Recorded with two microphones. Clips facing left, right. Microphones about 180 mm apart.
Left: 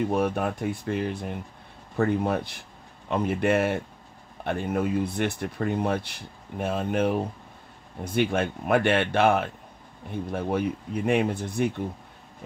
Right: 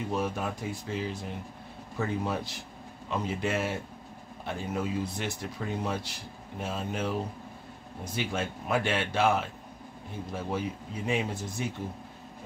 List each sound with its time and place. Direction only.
0.0 s speech: 60° left (ahead or behind)